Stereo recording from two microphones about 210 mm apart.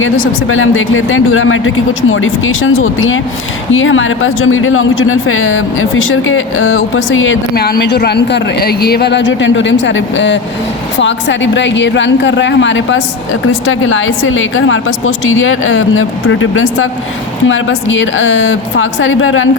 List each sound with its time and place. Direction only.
0.0 s speech: 70° left (ahead or behind)